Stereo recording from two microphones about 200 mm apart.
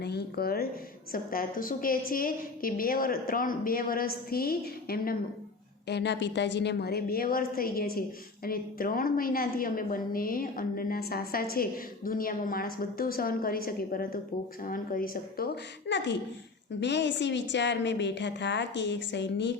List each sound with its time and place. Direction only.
0.0 s a woman's voice: 55° left (ahead or behind)
5.9 s a woman's voice: 60° left (ahead or behind)
15.9 s a woman's voice: 60° left (ahead or behind)